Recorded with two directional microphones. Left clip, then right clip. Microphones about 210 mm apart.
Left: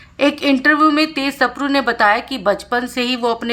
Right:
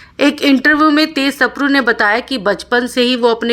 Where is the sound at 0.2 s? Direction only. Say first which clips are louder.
Right 3 dB; 20° right (ahead or behind).